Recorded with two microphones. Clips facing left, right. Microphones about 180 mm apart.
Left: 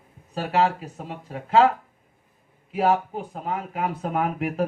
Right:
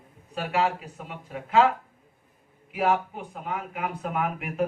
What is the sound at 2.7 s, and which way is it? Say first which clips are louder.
Speech: left 3 dB; 30° left (ahead or behind).